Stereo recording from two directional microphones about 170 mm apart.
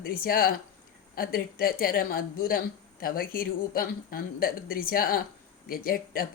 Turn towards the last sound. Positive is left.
turn(degrees=60)  # may be behind; listen again after turning